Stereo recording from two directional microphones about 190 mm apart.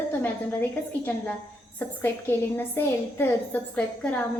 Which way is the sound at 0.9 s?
10° left (ahead or behind).